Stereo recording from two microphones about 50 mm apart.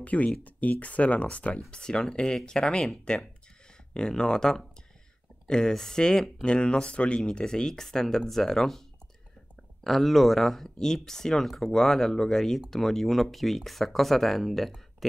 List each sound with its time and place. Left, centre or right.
0.0 s speech: left; by 6.3 s centre
6.4 s speech: left
9.8 s speech: centre